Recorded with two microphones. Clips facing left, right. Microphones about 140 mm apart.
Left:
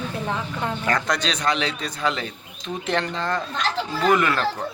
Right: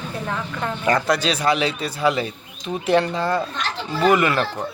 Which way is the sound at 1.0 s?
5° right (ahead or behind).